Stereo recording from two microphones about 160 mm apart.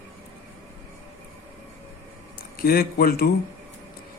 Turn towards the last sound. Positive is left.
turn(degrees=70)  # may be behind; listen again after turning